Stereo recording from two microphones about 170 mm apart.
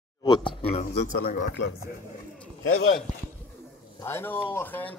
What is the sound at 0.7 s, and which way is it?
Speech, 65° left (ahead or behind).